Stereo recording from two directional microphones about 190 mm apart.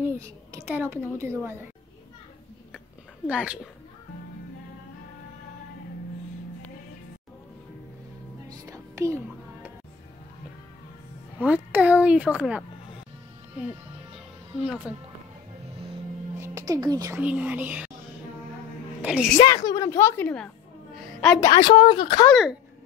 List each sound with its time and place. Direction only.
0.0 s a woman's voice: 15° right (ahead or behind)
3.3 s a woman's voice: 5° right (ahead or behind)
8.5 s music: 15° right (ahead or behind)
11.3 s a woman's voice: 10° right (ahead or behind)
14.1 s music: 5° right (ahead or behind)
16.3 s speech: 15° right (ahead or behind)
19.3 s a woman's voice: 20° left (ahead or behind)
20.9 s a sound: 5° left (ahead or behind)
21.4 s a woman's voice: 20° left (ahead or behind)
21.6 s a woman's voice: 30° left (ahead or behind)
22.3 s speech: 5° right (ahead or behind)